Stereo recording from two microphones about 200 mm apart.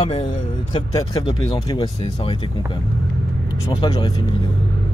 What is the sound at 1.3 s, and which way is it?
Speech, 20° left (ahead or behind).